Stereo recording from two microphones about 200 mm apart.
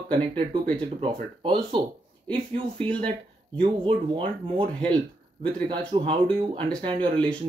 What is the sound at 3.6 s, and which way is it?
Speech, 25° right (ahead or behind).